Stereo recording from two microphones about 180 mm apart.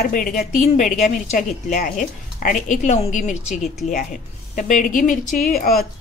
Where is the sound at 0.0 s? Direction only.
50° left (ahead or behind).